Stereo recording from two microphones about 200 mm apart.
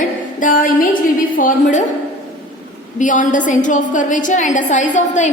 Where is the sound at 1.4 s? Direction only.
40° left (ahead or behind).